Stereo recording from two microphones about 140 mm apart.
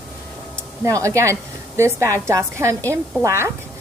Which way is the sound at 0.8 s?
20° right (ahead or behind).